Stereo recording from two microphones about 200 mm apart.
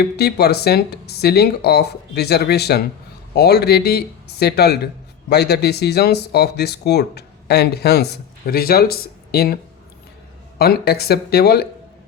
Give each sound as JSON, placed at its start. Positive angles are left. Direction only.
{"t": 0.0, "sound": "speech", "side_deg": 55}
{"t": 10.6, "sound": "speech", "side_deg": 50}